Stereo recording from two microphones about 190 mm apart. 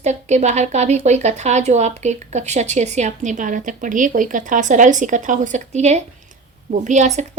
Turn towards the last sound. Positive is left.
turn(degrees=-40)  # may be behind; listen again after turning